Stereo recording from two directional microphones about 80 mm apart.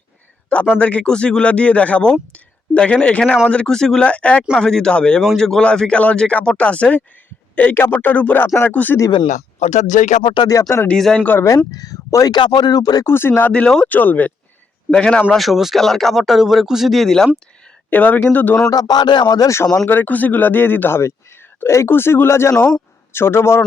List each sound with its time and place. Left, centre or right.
0.5 s speech: centre
10.2 s speech: left
10.5 s speech: left
10.9 s speech: centre
11.4 s speech: left
12.4 s speech: left
13.1 s speech: left
13.5 s speech: centre
13.8 s speech: left
14.8 s speech: centre
15.3 s speech: centre
17.9 s speech: centre
18.7 s speech: left
19.9 s speech: left